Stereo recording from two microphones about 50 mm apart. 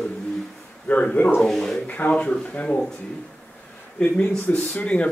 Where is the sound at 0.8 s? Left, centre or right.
Left.